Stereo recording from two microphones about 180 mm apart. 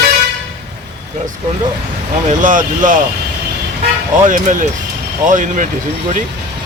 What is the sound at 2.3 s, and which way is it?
Speech, 45° right (ahead or behind).